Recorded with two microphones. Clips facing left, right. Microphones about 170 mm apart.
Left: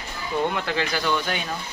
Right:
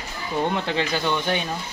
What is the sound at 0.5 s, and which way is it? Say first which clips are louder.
Speech: right 2 dB; 25° right (ahead or behind).